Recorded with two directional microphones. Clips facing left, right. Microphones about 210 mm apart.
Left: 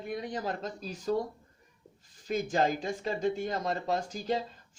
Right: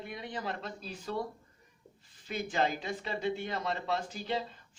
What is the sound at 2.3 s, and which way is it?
Speech, 40° left (ahead or behind).